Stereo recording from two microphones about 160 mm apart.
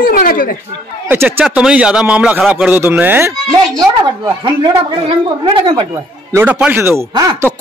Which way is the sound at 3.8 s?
25° right (ahead or behind).